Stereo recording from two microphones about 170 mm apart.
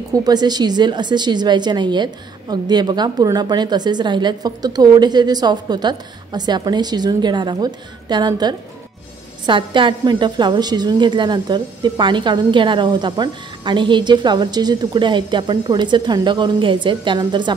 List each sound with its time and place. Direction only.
0.1 s a woman's voice: 25° right (ahead or behind)